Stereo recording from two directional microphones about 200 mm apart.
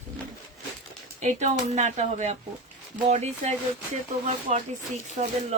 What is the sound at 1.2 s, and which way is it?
Speech, 35° right (ahead or behind).